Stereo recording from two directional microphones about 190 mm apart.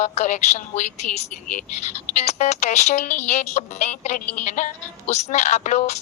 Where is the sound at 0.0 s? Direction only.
40° left (ahead or behind).